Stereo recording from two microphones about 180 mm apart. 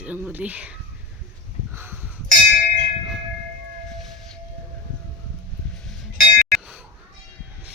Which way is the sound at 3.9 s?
Centre (ahead or behind).